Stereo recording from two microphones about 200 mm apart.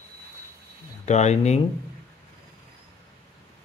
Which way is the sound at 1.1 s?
35° left (ahead or behind).